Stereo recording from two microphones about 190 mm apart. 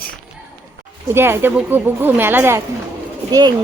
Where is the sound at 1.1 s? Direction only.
10° right (ahead or behind).